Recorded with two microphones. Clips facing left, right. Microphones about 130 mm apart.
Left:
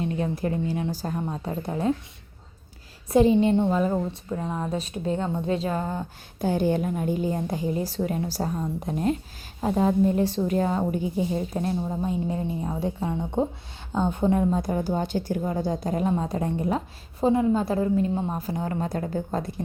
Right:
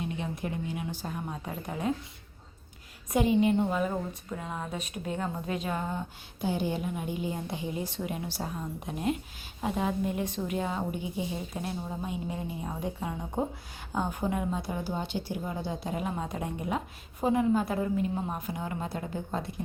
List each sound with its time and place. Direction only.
0.0 s a woman's voice: 40° left (ahead or behind)
3.1 s a woman's voice: 30° left (ahead or behind)
6.4 s a woman's voice: 45° left (ahead or behind)